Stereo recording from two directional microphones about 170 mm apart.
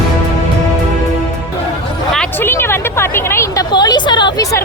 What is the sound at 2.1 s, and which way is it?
Speech, 10° left (ahead or behind).